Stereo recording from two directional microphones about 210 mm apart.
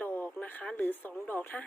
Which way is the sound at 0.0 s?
10° left (ahead or behind).